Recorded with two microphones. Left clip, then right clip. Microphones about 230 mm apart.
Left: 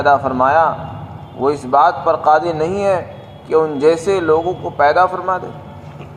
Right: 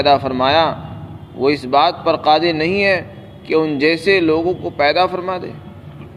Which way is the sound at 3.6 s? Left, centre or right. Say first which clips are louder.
Left 2 dB; right.